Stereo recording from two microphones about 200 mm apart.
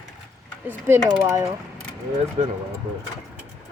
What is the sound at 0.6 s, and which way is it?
Speech, 15° right (ahead or behind).